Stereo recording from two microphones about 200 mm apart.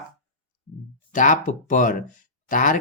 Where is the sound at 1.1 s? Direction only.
40° left (ahead or behind).